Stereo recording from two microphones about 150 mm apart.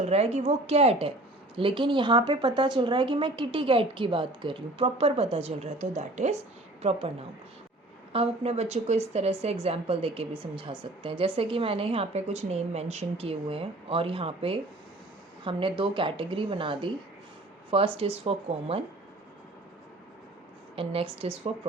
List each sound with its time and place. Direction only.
0.0 s a woman's voice: 45° right (ahead or behind)
20.7 s speech: 40° right (ahead or behind)